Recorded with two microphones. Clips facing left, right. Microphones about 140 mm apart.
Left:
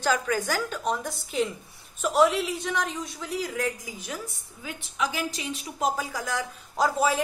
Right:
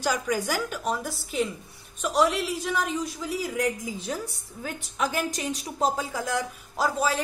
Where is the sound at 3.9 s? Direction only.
30° right (ahead or behind).